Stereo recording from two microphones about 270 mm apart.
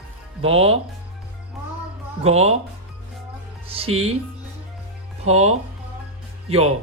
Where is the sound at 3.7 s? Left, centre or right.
Right.